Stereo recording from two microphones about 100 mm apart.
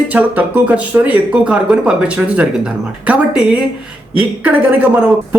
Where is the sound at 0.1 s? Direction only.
15° right (ahead or behind).